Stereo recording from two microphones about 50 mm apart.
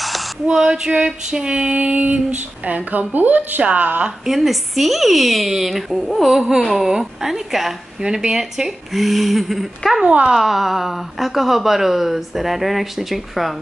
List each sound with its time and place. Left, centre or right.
0.0 s a sound: centre
0.5 s female singing: centre; by 3.6 s right
3.7 s speech: right
4.3 s a woman's voice: centre
8.0 s a woman's voice: centre
8.9 s speech: centre
10.0 s female singing: right
10.3 s speech: centre